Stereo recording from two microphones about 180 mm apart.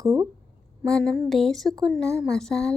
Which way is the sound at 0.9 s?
5° left (ahead or behind).